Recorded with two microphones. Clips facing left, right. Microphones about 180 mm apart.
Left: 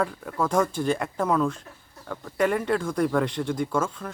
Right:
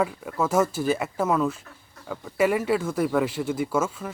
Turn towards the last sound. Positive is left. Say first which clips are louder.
# right 1 dB
turn(degrees=-5)  # may be behind; listen again after turning